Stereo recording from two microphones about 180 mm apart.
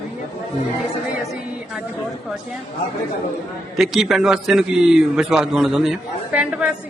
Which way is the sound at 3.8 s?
Centre (ahead or behind).